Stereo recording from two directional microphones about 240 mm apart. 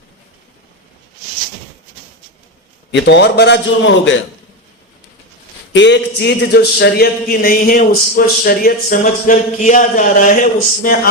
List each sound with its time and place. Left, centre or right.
2.9 s a man's voice: left
5.7 s speech: left